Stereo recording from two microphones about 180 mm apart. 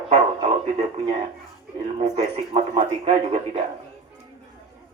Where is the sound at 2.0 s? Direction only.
35° right (ahead or behind).